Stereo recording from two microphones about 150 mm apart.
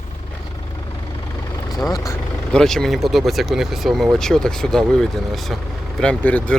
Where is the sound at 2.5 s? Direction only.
5° left (ahead or behind).